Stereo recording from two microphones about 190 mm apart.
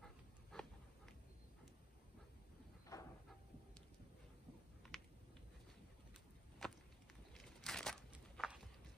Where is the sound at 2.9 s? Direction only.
15° left (ahead or behind).